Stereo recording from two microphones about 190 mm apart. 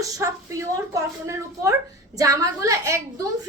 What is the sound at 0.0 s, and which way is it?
A woman's voice, 15° right (ahead or behind).